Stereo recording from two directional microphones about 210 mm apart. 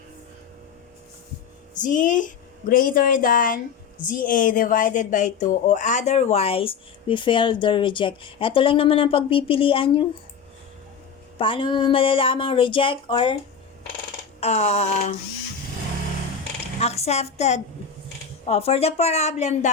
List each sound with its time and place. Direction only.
1.7 s a woman's voice: 35° left (ahead or behind)
11.3 s speech: 25° left (ahead or behind)
14.4 s speech: 30° left (ahead or behind)
16.8 s a woman's voice: 30° left (ahead or behind)